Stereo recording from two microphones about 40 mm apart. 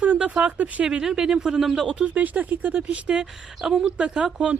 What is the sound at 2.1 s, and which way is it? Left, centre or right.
Speech, right.